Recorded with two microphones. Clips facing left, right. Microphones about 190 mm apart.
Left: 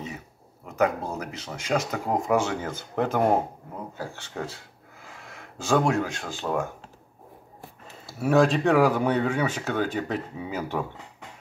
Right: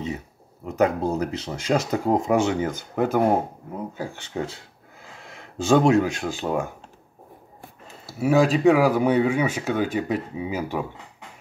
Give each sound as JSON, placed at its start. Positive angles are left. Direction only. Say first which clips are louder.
{"t": 0.7, "sound": "speech", "louder": "right 4 dB", "side_deg": -30}
{"t": 8.1, "sound": "speech", "louder": "right 2 dB", "side_deg": -5}